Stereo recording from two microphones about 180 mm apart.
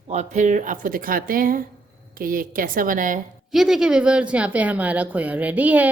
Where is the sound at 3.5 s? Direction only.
Centre (ahead or behind).